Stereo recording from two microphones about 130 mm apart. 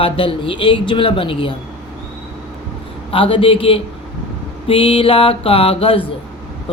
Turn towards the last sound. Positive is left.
turn(degrees=45)  # may be behind; listen again after turning